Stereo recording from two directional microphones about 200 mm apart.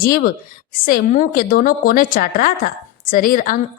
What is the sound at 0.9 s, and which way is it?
A woman's voice, 45° left (ahead or behind).